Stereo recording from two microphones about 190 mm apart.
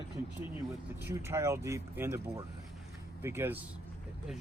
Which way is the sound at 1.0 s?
15° right (ahead or behind).